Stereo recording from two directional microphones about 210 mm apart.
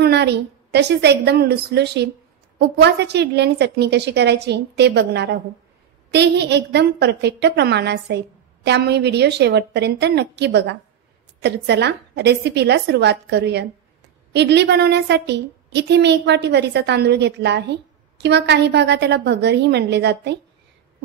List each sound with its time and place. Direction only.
0.0 s a woman's voice: 50° right (ahead or behind)